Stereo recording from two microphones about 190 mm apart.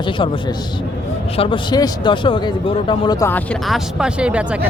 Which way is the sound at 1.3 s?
30° left (ahead or behind).